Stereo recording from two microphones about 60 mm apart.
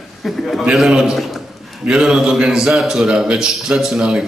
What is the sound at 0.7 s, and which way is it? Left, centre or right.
Speech, centre.